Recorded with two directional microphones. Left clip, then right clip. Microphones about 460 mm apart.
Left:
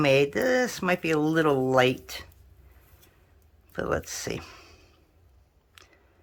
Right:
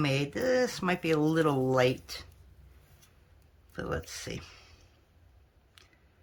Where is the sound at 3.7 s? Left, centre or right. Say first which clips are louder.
Left 7 dB; centre.